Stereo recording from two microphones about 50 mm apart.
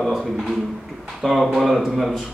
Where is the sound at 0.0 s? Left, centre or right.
Centre.